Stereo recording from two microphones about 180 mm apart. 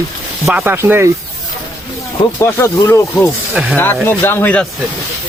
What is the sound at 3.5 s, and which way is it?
Speech, 5° right (ahead or behind).